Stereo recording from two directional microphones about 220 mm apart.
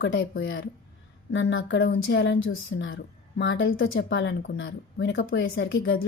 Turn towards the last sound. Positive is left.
turn(degrees=55)  # may be behind; listen again after turning